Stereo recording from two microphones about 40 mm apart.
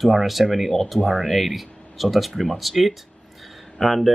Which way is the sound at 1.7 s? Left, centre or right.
Left.